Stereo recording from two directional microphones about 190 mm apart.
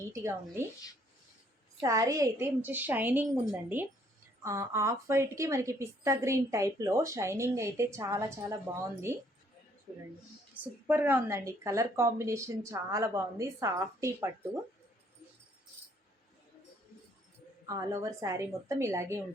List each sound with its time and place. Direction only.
0.1 s a woman's voice: 15° right (ahead or behind)
1.8 s a woman's voice: 15° right (ahead or behind)
10.5 s a woman's voice: 10° right (ahead or behind)
17.7 s a woman's voice: 15° right (ahead or behind)